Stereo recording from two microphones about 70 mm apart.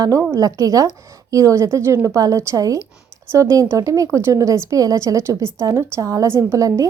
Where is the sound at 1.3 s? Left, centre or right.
Right.